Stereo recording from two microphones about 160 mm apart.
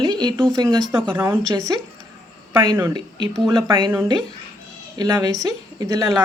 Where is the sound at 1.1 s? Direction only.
15° right (ahead or behind).